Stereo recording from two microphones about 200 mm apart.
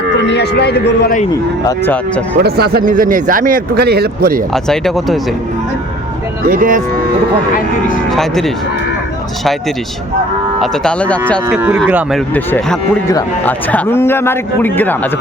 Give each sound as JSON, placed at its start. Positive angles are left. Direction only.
{"t": 0.2, "sound": "a man's voice", "side_deg": 60}
{"t": 1.6, "sound": "a man's voice", "side_deg": 10}
{"t": 2.4, "sound": "speech", "side_deg": -50}
{"t": 4.5, "sound": "speech", "side_deg": 0}
{"t": 6.5, "sound": "speech", "side_deg": -45}
{"t": 8.1, "sound": "speech", "side_deg": 0}
{"t": 10.6, "sound": "speech", "side_deg": 5}
{"t": 11.5, "sound": "moo", "side_deg": -5}
{"t": 12.3, "sound": "a man's voice", "side_deg": 5}